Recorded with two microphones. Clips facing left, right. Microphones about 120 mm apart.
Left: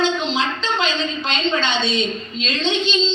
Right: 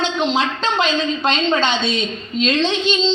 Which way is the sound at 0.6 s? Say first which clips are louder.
Right 3 dB; 50° right (ahead or behind).